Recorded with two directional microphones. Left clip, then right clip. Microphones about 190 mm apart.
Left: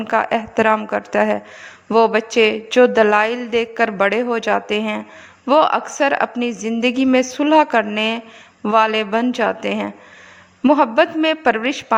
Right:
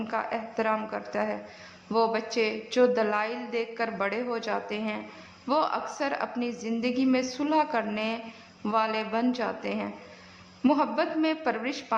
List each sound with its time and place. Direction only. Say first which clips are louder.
0.1 s a woman's voice: left 14 dB; 45° left (ahead or behind)